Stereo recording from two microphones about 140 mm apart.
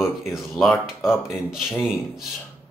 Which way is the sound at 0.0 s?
Centre (ahead or behind).